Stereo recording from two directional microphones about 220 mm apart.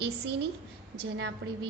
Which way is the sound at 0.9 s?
50° right (ahead or behind).